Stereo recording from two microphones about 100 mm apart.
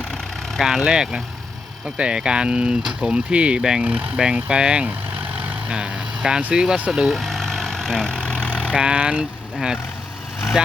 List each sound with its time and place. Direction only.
0.5 s speech: centre (ahead or behind)
6.9 s vehicle: centre (ahead or behind)
8.7 s speech: 10° right (ahead or behind)